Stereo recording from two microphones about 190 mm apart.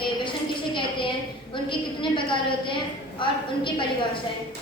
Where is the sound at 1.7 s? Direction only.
25° left (ahead or behind).